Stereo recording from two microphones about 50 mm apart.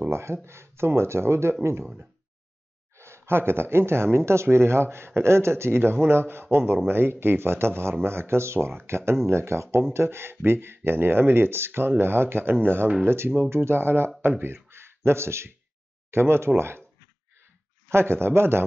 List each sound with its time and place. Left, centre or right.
0.1 s speech: right
3.0 s speech: right
17.8 s speech: right